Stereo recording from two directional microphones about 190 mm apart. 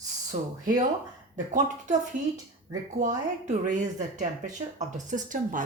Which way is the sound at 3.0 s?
40° right (ahead or behind).